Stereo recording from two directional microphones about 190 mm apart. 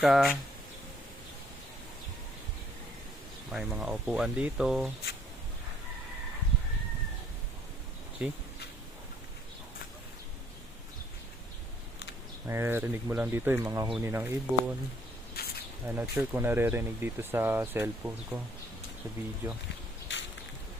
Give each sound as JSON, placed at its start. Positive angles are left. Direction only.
{"t": 0.0, "sound": "speech", "side_deg": 0}
{"t": 3.5, "sound": "speech", "side_deg": -5}
{"t": 8.2, "sound": "speech", "side_deg": -5}
{"t": 12.5, "sound": "speech", "side_deg": -15}
{"t": 15.4, "sound": "insect", "side_deg": 55}
{"t": 15.9, "sound": "speech", "side_deg": -10}